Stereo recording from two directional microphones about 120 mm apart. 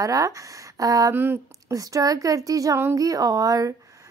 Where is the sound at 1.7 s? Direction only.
30° right (ahead or behind).